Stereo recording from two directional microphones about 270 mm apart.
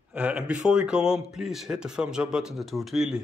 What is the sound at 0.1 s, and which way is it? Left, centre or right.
A man's voice, centre.